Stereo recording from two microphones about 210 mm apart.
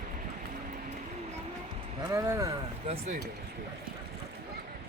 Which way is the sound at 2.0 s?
15° right (ahead or behind).